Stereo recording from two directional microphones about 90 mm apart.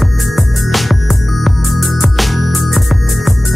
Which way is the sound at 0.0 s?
Centre (ahead or behind).